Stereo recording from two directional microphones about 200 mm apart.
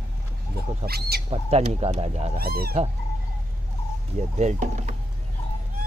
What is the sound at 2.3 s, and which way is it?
Speech, 50° right (ahead or behind).